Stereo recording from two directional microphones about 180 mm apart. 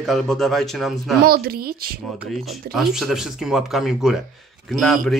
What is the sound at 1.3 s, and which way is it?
Speech, 55° right (ahead or behind).